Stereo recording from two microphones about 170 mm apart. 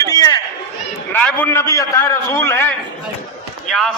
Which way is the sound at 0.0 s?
20° left (ahead or behind).